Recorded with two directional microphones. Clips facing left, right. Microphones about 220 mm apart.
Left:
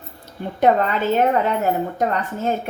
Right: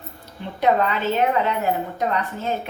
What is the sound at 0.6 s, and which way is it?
A woman's voice, 50° left (ahead or behind).